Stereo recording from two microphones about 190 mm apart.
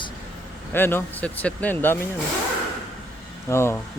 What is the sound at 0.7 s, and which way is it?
Speech, 10° left (ahead or behind).